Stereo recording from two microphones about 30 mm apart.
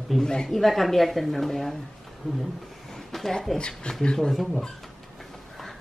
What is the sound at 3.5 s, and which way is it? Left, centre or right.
Speech, left.